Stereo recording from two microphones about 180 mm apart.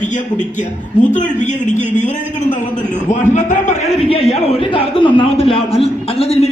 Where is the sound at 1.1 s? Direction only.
45° left (ahead or behind).